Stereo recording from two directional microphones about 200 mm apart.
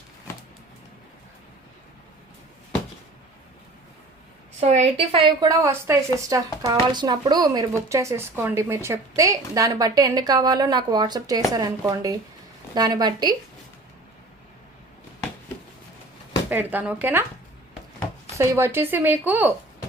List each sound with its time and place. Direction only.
4.6 s speech: 30° right (ahead or behind)
16.5 s speech: 10° right (ahead or behind)
18.3 s speech: 15° right (ahead or behind)